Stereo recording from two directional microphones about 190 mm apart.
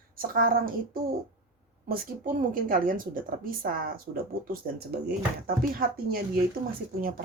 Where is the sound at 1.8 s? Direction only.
45° right (ahead or behind).